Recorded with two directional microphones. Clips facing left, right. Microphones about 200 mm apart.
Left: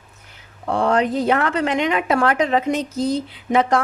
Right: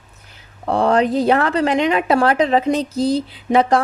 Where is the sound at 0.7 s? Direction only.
35° right (ahead or behind).